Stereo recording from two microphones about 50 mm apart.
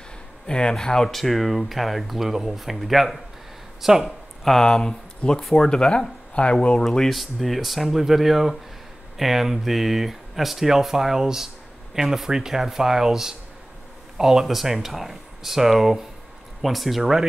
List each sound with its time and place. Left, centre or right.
0.5 s speech: centre
4.5 s speech: centre
6.8 s speech: centre